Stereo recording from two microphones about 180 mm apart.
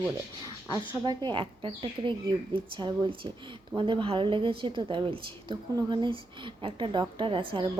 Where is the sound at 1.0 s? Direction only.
25° right (ahead or behind).